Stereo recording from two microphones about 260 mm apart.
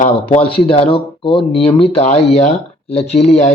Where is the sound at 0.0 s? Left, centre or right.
Left.